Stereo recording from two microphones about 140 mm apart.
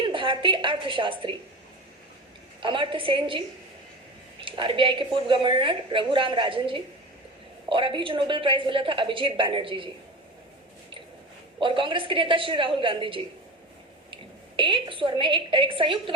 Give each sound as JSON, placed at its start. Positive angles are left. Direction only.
{"t": 0.1, "sound": "a woman's voice", "side_deg": -35}
{"t": 2.6, "sound": "a woman's voice", "side_deg": -35}
{"t": 11.6, "sound": "a woman's voice", "side_deg": -35}